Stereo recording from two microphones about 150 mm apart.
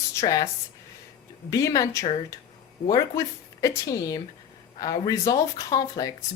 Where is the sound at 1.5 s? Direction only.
20° left (ahead or behind).